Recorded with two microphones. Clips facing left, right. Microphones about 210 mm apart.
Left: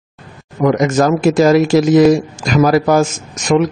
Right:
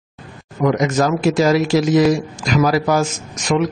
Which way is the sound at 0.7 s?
50° left (ahead or behind).